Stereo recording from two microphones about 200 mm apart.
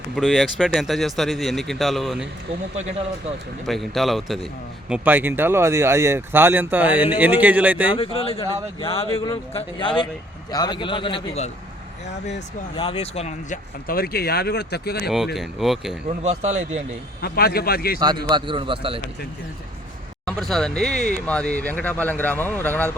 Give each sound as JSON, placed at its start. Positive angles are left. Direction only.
{"t": 0.2, "sound": "speech", "side_deg": 0}
{"t": 3.7, "sound": "speech", "side_deg": 0}
{"t": 7.9, "sound": "a man's voice", "side_deg": 30}
{"t": 12.7, "sound": "speech", "side_deg": 25}
{"t": 15.4, "sound": "speech", "side_deg": 0}
{"t": 16.0, "sound": "speech", "side_deg": -35}
{"t": 17.2, "sound": "speech", "side_deg": 50}
{"t": 18.0, "sound": "a man's voice", "side_deg": -20}
{"t": 20.2, "sound": "speech", "side_deg": 0}